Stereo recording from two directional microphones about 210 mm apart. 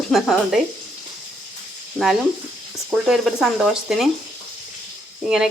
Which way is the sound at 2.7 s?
Centre (ahead or behind).